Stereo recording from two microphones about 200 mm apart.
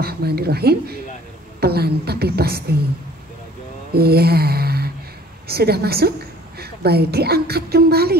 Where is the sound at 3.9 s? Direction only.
50° right (ahead or behind).